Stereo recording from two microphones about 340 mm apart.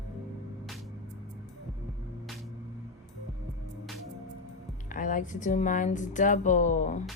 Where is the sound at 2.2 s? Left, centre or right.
Centre.